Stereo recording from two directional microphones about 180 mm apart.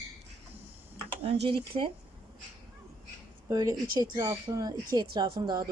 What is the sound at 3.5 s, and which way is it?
Speech, 20° right (ahead or behind).